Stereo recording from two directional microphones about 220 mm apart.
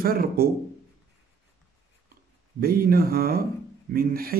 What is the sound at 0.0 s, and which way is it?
Speech, 40° right (ahead or behind).